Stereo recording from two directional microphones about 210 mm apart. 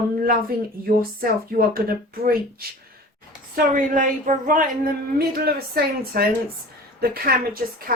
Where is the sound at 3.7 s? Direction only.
40° right (ahead or behind).